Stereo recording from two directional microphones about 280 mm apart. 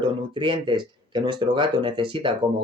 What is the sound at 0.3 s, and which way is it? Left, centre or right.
Speech, centre.